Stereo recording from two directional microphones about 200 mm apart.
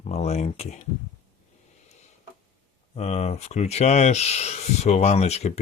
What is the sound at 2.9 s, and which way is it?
Speech, 35° left (ahead or behind).